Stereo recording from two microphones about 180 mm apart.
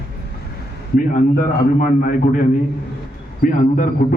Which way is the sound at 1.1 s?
45° left (ahead or behind).